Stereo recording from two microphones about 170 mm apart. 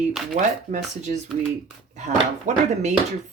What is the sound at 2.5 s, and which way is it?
Speech, 45° right (ahead or behind).